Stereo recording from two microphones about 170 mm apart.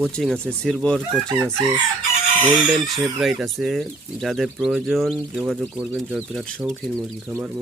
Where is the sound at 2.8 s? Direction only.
Centre (ahead or behind).